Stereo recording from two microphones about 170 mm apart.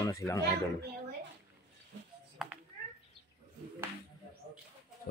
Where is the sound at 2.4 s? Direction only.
Centre (ahead or behind).